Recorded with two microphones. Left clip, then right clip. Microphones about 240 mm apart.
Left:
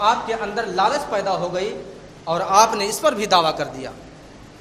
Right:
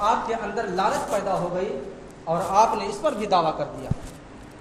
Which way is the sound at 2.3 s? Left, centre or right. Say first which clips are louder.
Left 4 dB; left.